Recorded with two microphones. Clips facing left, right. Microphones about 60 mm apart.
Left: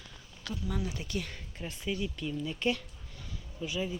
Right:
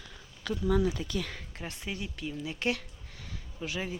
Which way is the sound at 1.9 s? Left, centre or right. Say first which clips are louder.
Left 4 dB; right.